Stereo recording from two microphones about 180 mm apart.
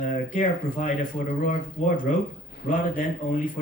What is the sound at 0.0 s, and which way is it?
Speech, 45° left (ahead or behind).